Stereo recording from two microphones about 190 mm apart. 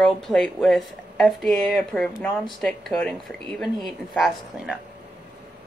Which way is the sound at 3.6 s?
Centre (ahead or behind).